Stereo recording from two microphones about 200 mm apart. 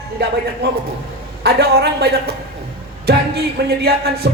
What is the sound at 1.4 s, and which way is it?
A man's voice, 55° right (ahead or behind).